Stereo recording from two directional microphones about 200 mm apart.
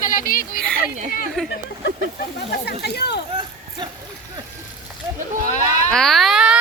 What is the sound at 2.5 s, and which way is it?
Speech, 55° left (ahead or behind).